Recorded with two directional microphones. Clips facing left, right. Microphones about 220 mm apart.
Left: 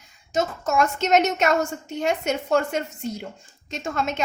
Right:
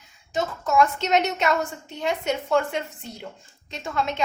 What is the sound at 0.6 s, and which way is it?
A woman's voice, 45° left (ahead or behind).